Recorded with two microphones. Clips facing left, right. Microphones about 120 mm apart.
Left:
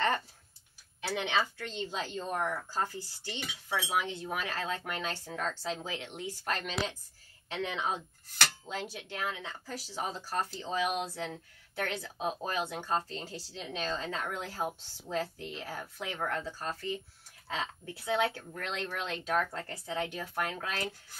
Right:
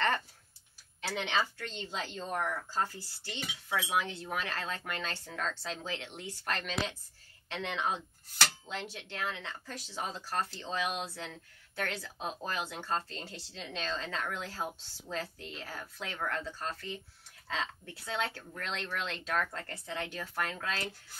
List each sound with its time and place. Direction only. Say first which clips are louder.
1.0 s speech: left 2 dB; 10° left (ahead or behind)